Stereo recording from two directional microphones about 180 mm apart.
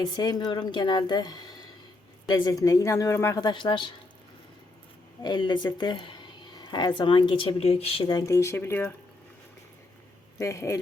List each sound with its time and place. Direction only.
0.0 s speech: 20° left (ahead or behind)
5.2 s speech: 25° left (ahead or behind)
10.3 s speech: 15° left (ahead or behind)